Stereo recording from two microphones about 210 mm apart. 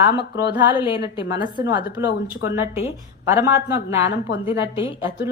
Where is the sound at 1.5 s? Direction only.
20° right (ahead or behind).